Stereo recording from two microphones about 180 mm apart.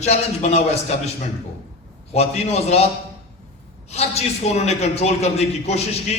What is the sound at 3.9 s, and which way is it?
A man's voice, 35° left (ahead or behind).